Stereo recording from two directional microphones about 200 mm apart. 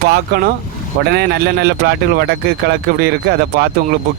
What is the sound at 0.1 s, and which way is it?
A man's voice, 50° right (ahead or behind).